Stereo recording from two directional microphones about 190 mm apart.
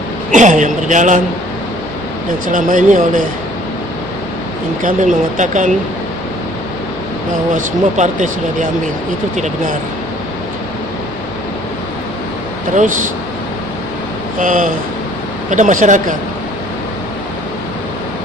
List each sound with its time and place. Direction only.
0.3 s speech: 40° right (ahead or behind)
2.5 s speech: 45° right (ahead or behind)
4.8 s speech: 45° right (ahead or behind)
7.5 s speech: 40° right (ahead or behind)
9.3 s speech: 40° right (ahead or behind)
14.3 s speech: 40° right (ahead or behind)